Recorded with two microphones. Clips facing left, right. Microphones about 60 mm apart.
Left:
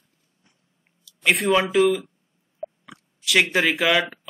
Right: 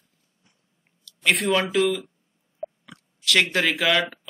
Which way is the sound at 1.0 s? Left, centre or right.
Centre.